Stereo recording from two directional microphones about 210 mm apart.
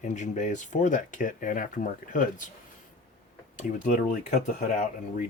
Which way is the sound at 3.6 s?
40° left (ahead or behind).